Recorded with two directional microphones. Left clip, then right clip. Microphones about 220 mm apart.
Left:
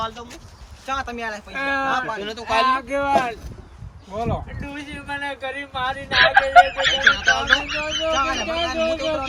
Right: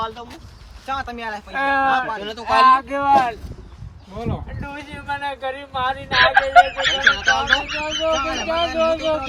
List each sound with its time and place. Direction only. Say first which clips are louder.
0.0 s speech: right 1 dB; 15° right (ahead or behind)
1.5 s speech: right 4 dB; 30° right (ahead or behind)
2.0 s speech: right 1 dB; 10° right (ahead or behind)
2.6 s speech: right 6 dB; 25° right (ahead or behind)
4.8 s speech: right 2 dB; 20° right (ahead or behind)
6.1 s speech: even; centre (ahead or behind)